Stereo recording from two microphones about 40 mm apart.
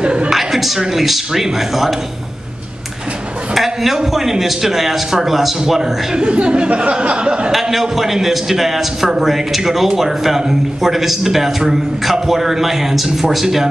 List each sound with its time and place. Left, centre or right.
0.0 s a sound: right
0.3 s speech: centre
3.5 s a man's voice: centre
5.6 s a man's voice: centre
7.7 s a man's voice: centre